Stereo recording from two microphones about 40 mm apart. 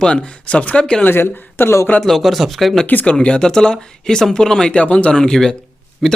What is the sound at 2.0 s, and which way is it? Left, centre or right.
Speech, centre.